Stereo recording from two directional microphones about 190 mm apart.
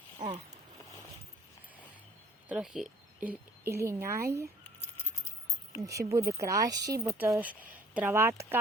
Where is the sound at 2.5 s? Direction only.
5° right (ahead or behind).